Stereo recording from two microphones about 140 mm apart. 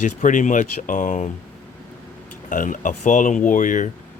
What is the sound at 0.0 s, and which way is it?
Speech, 65° left (ahead or behind).